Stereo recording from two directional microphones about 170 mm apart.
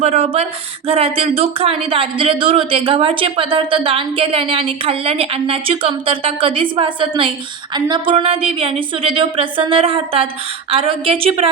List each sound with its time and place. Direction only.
0.0 s speech: 35° right (ahead or behind)